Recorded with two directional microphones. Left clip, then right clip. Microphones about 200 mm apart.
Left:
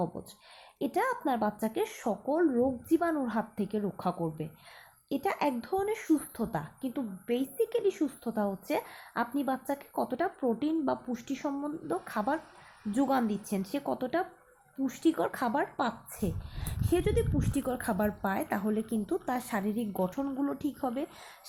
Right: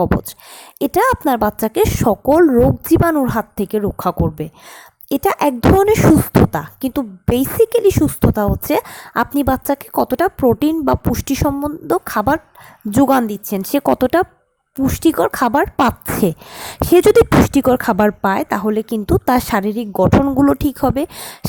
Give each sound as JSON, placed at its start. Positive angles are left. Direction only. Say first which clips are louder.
{"t": 0.8, "sound": "speech", "louder": "right 16 dB", "side_deg": -45}